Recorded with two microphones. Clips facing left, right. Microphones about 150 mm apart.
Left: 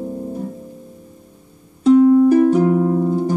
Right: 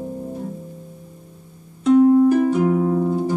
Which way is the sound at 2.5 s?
35° left (ahead or behind).